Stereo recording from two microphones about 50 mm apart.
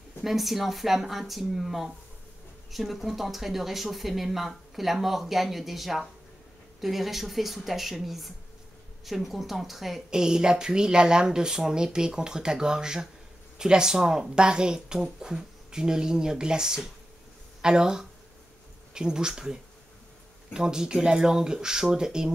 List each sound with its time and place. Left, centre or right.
0.2 s speech: centre